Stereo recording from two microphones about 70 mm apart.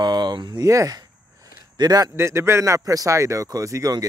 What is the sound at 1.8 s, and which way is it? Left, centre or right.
Speech, right.